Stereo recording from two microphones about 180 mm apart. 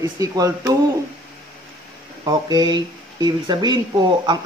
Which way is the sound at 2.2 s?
25° right (ahead or behind).